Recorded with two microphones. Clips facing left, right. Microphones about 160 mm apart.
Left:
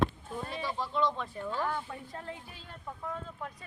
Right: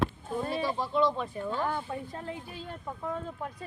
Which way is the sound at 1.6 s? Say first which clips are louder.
Right 2 dB; 20° right (ahead or behind).